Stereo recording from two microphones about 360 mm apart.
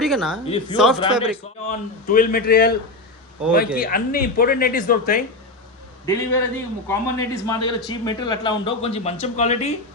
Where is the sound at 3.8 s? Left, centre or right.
Left.